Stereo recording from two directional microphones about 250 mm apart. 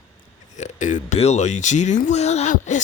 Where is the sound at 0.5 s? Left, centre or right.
Left.